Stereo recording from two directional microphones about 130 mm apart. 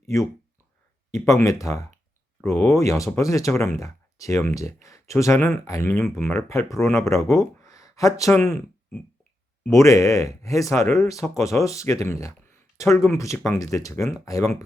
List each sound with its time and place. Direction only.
0.0 s speech: 25° left (ahead or behind)
7.6 s a sound: 25° left (ahead or behind)
8.4 s speech: 15° left (ahead or behind)